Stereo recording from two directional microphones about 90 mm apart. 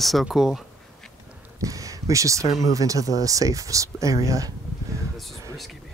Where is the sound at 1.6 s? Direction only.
40° right (ahead or behind).